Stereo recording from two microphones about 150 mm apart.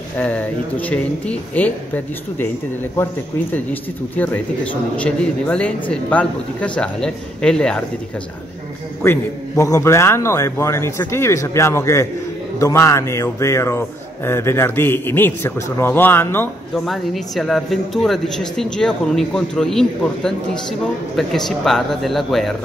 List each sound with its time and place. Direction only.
0.2 s speech: 10° left (ahead or behind)
4.9 s speech: 10° left (ahead or behind)
9.0 s a man's voice: 20° left (ahead or behind)
16.7 s speech: centre (ahead or behind)